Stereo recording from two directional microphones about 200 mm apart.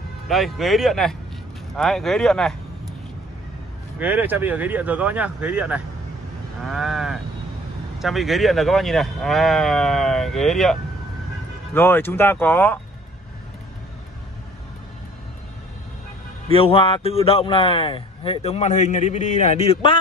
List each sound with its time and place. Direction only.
0.3 s speech: centre (ahead or behind)
4.0 s speech: 10° right (ahead or behind); by 12.8 s 10° left (ahead or behind)
16.4 s a man's voice: 30° left (ahead or behind)